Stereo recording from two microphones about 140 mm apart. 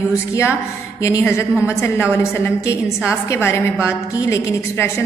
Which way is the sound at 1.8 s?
20° left (ahead or behind).